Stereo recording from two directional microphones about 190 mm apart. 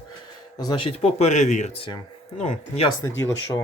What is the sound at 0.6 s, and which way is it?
Speech, 25° left (ahead or behind).